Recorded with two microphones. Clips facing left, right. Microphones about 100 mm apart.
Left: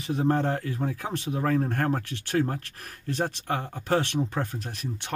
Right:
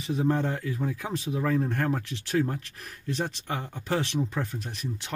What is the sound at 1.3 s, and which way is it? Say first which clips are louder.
Speech: left 1 dB; 40° left (ahead or behind).